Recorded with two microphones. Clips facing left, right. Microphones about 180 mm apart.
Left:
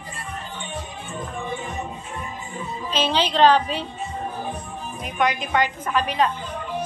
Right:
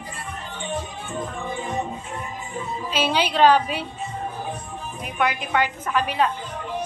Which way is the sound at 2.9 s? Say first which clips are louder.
Even; 10° right (ahead or behind).